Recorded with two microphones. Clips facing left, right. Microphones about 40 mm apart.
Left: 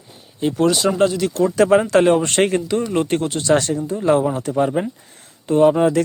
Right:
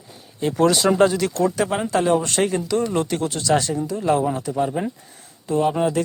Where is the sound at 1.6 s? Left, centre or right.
Left.